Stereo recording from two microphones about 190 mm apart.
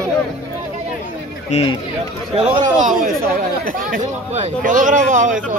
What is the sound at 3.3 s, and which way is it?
Speech, 50° right (ahead or behind).